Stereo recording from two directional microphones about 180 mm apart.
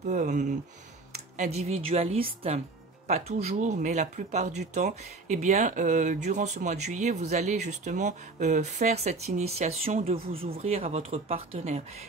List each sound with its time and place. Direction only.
0.0 s speech: 45° right (ahead or behind)